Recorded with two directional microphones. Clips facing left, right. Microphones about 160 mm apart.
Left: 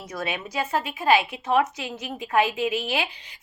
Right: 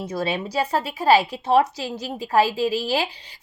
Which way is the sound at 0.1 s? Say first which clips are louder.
Right 4 dB; 30° right (ahead or behind).